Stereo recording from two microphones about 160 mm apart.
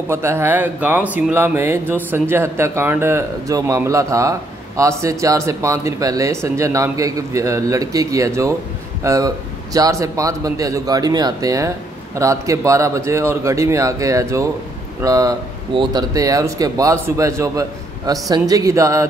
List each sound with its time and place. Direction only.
0.1 s speech: 15° right (ahead or behind)